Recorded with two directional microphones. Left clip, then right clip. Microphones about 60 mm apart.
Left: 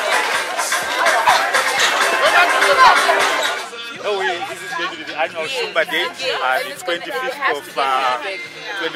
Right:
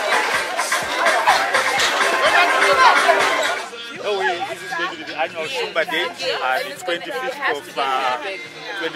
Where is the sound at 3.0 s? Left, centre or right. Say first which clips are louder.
Even; centre.